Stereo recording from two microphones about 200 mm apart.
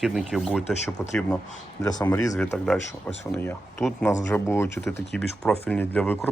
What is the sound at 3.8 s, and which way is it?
Speech, centre (ahead or behind).